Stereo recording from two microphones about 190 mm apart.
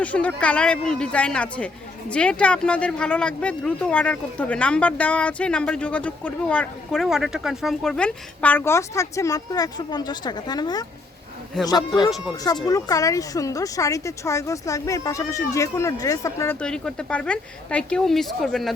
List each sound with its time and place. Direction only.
0.0 s speech: 5° left (ahead or behind)